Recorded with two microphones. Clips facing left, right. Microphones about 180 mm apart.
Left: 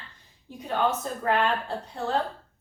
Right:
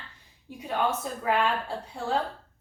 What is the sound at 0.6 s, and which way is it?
Speech, 10° right (ahead or behind).